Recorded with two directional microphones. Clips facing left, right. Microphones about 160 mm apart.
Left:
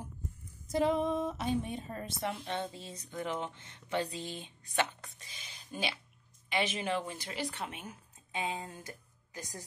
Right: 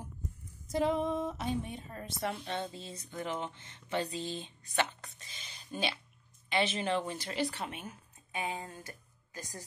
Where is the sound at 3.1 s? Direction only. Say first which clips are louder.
Left 1 dB; 15° right (ahead or behind).